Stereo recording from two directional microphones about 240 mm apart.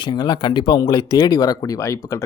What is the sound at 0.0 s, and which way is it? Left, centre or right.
Speech, centre.